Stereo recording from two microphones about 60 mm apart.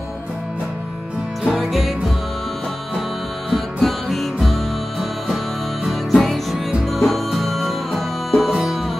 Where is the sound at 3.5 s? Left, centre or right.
Centre.